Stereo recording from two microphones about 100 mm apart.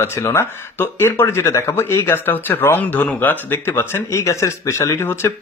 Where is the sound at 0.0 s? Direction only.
25° left (ahead or behind).